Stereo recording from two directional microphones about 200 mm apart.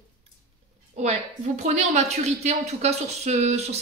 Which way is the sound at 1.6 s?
35° right (ahead or behind).